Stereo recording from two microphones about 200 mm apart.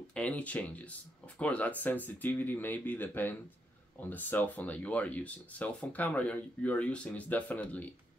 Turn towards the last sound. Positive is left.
turn(degrees=10)  # may be behind; listen again after turning